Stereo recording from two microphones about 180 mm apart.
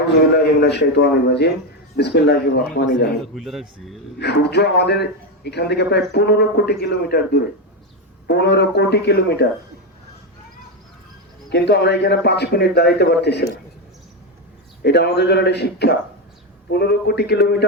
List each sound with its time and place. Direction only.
0.3 s a man's voice: 65° left (ahead or behind)
3.3 s speech: centre (ahead or behind)
4.2 s a man's voice: 65° left (ahead or behind)
11.4 s a man's voice: 70° left (ahead or behind)
14.8 s a man's voice: 70° left (ahead or behind)